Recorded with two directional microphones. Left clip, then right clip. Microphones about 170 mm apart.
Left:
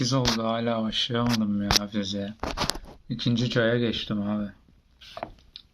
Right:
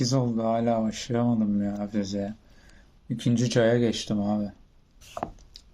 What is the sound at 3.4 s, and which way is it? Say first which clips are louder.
Speech: right 2 dB; 20° right (ahead or behind).